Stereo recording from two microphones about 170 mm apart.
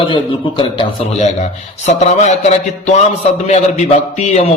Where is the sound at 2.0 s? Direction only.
40° left (ahead or behind).